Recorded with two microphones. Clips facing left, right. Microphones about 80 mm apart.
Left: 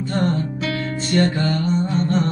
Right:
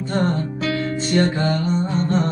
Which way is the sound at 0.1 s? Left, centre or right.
Right.